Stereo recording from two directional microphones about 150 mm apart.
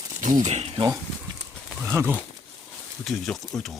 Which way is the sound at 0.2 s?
55° right (ahead or behind).